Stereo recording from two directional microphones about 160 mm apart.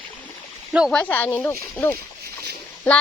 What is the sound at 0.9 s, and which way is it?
Speech, 10° left (ahead or behind).